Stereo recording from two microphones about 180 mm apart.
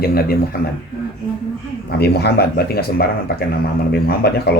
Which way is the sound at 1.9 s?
65° left (ahead or behind).